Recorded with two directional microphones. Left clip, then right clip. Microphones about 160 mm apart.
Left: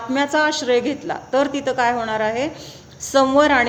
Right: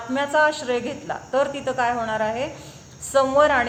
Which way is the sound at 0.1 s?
50° left (ahead or behind).